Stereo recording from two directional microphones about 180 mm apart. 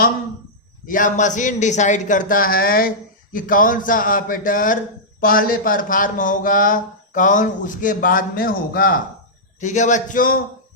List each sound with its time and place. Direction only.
0.9 s speech: 45° left (ahead or behind)
9.6 s speech: 45° left (ahead or behind)